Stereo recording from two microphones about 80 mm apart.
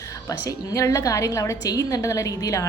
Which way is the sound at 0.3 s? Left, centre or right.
Left.